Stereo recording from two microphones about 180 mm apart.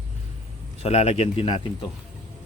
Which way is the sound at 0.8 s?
35° left (ahead or behind).